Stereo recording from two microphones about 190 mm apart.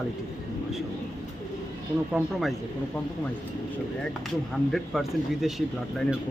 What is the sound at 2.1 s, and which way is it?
Speech, centre (ahead or behind).